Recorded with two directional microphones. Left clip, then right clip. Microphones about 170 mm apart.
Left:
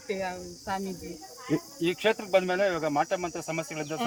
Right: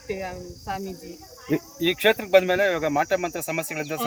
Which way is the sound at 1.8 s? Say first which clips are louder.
Right 6 dB; 90° right.